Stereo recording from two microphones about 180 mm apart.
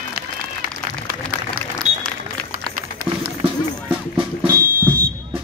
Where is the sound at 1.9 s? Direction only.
35° right (ahead or behind).